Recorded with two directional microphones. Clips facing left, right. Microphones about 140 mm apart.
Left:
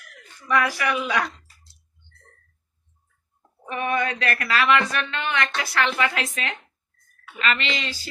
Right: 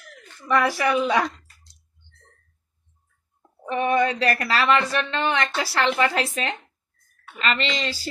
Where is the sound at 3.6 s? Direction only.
30° right (ahead or behind).